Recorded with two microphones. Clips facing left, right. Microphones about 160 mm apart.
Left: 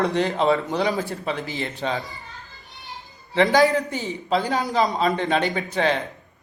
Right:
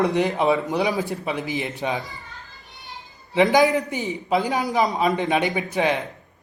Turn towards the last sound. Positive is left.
turn(degrees=-15)  # may be behind; listen again after turning